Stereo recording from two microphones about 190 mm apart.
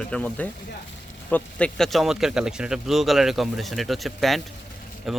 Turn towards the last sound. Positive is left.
turn(degrees=0)  # may be behind; listen again after turning